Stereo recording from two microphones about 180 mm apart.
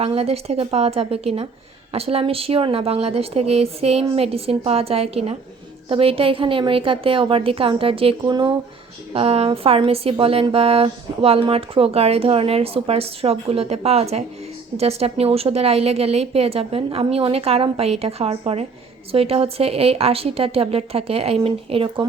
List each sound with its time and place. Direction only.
0.0 s a woman's voice: 35° right (ahead or behind)